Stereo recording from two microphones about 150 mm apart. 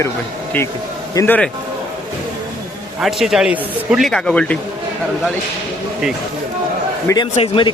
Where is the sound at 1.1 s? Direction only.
15° left (ahead or behind).